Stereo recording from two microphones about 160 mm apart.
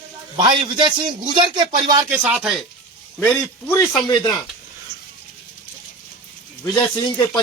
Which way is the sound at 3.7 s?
20° left (ahead or behind).